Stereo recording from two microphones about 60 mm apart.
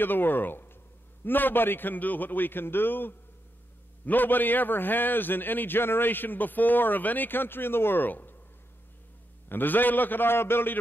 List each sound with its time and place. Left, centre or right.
0.0 s a man's voice: left
9.5 s a man's voice: left